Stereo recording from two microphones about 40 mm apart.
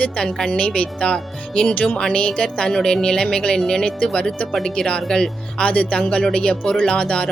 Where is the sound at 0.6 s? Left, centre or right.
Left.